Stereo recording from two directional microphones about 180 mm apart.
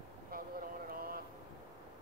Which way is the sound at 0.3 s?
55° right (ahead or behind).